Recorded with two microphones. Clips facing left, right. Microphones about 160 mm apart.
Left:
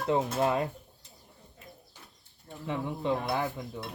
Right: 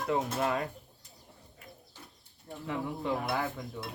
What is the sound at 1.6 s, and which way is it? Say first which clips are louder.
Bird: left 1 dB; 25° left (ahead or behind).